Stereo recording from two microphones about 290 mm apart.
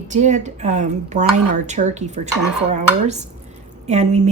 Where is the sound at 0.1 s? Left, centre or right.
Right.